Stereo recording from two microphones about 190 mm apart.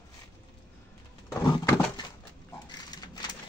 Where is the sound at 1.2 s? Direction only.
15° left (ahead or behind).